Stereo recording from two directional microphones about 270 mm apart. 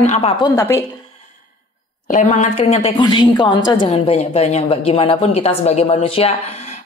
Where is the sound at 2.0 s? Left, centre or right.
Left.